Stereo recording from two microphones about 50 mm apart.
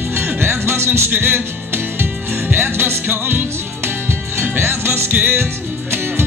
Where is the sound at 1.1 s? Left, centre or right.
Right.